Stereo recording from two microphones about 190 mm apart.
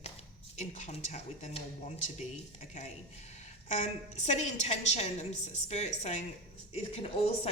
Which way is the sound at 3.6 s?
40° left (ahead or behind).